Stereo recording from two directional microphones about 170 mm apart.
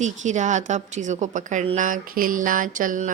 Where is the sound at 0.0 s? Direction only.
45° right (ahead or behind).